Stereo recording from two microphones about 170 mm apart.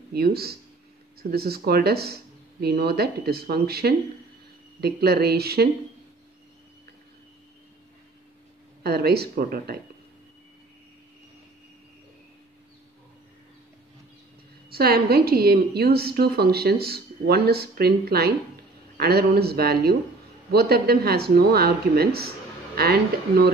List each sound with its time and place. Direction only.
0.1 s a woman's voice: 65° right (ahead or behind)
8.8 s speech: 65° right (ahead or behind)
14.7 s a woman's voice: 65° right (ahead or behind)